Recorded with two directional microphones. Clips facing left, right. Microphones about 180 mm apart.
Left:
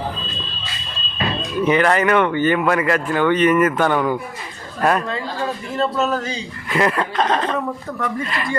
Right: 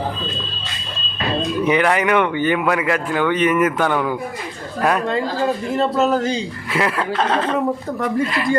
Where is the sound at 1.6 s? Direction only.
10° right (ahead or behind).